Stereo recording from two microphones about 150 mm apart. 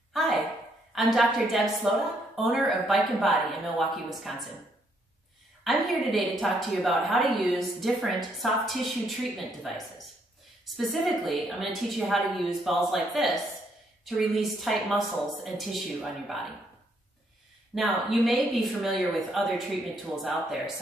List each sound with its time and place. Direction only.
0.1 s a sound: centre (ahead or behind)
0.9 s a woman's voice: centre (ahead or behind)
5.6 s a woman's voice: centre (ahead or behind)
17.7 s a woman's voice: centre (ahead or behind)